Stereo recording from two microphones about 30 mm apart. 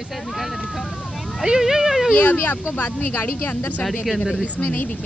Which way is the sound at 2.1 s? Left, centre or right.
Left.